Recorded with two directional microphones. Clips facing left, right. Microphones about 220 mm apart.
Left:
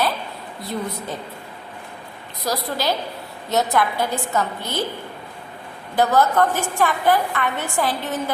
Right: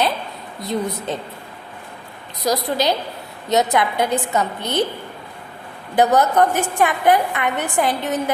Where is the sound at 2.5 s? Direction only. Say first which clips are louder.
Right 4 dB; 20° right (ahead or behind).